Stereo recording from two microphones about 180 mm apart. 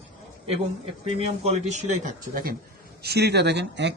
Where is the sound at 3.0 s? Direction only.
65° right (ahead or behind).